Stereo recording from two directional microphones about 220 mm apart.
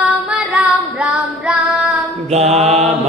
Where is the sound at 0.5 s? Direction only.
5° right (ahead or behind).